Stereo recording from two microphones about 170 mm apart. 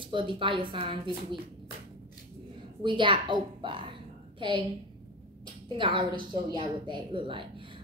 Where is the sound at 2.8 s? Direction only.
30° right (ahead or behind).